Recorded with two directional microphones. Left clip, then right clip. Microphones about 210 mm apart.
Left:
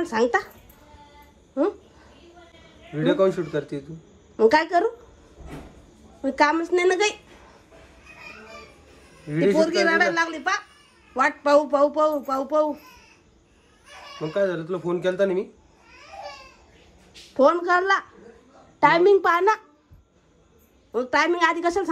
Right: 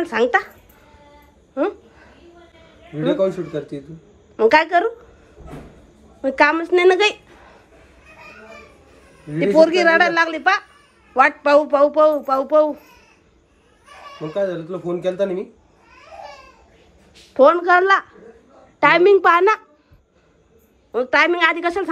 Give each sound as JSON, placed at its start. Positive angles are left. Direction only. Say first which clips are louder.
{"t": 0.0, "sound": "speech", "louder": "right 4 dB", "side_deg": 20}
{"t": 1.5, "sound": "a sound", "louder": "right 2 dB", "side_deg": 25}
{"t": 2.9, "sound": "speech", "louder": "right 1 dB", "side_deg": 0}
{"t": 4.4, "sound": "speech", "louder": "right 4 dB", "side_deg": 25}
{"t": 6.2, "sound": "a woman's voice", "louder": "right 5 dB", "side_deg": 20}
{"t": 9.6, "sound": "a woman's voice", "louder": "right 9 dB", "side_deg": 15}
{"t": 14.1, "sound": "speech", "louder": "right 2 dB", "side_deg": 0}
{"t": 17.3, "sound": "a woman's voice", "louder": "right 6 dB", "side_deg": 15}
{"t": 20.9, "sound": "speech", "louder": "right 5 dB", "side_deg": 20}